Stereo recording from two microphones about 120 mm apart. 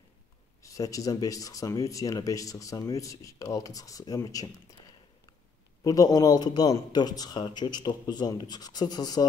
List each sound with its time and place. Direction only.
0.6 s speech: 30° left (ahead or behind)
5.9 s a man's voice: 30° left (ahead or behind)